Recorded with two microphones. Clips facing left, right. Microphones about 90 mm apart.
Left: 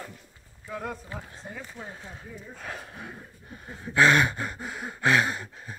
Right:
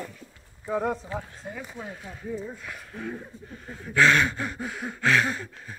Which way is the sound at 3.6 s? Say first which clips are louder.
Even; 10° left (ahead or behind).